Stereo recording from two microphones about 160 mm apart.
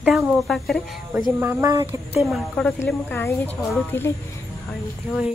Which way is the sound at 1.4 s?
20° right (ahead or behind).